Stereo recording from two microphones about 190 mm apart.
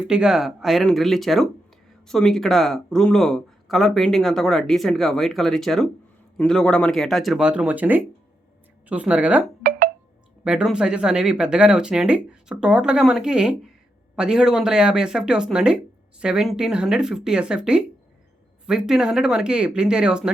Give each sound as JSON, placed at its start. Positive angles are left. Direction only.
{"t": 0.0, "sound": "speech", "side_deg": -5}
{"t": 9.6, "sound": "telephone dialing", "side_deg": -50}
{"t": 10.4, "sound": "speech", "side_deg": -5}